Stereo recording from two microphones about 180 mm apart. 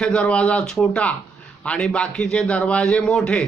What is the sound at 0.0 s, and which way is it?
A man's voice, 5° left (ahead or behind).